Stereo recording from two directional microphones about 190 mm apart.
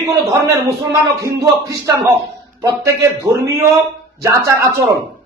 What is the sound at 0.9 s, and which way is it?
A man's voice, 15° right (ahead or behind).